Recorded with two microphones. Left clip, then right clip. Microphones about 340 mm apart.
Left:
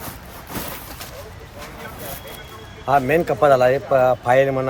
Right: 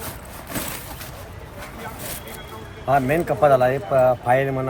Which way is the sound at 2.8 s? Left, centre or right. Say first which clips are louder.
Left 2 dB; centre.